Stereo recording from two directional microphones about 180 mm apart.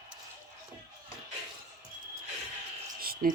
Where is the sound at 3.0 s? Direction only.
55° right (ahead or behind).